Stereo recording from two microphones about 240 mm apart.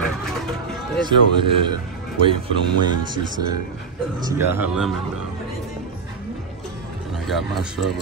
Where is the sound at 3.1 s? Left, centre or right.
Centre.